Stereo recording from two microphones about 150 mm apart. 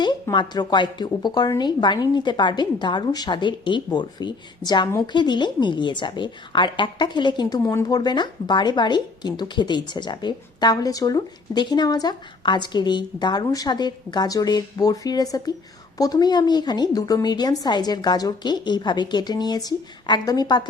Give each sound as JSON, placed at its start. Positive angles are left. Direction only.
{"t": 0.0, "sound": "a woman's voice", "side_deg": 30}
{"t": 7.6, "sound": "speech", "side_deg": 20}